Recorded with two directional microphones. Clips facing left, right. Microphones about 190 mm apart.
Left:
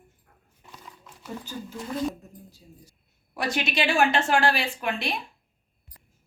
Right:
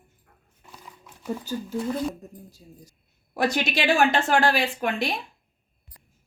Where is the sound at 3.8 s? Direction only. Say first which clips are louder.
Right 2 dB; 40° right (ahead or behind).